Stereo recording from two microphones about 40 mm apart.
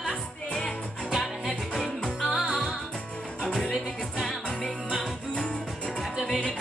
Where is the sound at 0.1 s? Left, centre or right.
Left.